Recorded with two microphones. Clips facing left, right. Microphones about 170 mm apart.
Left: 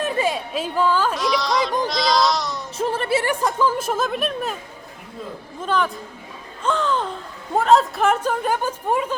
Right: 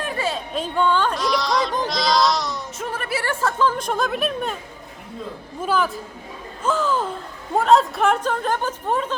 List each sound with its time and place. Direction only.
0.0 s speech: 15° left (ahead or behind); by 1.8 s centre (ahead or behind)
1.9 s goat: centre (ahead or behind)
2.7 s music: 30° left (ahead or behind)
3.2 s speech: 15° left (ahead or behind)
5.6 s a woman's voice: 5° right (ahead or behind)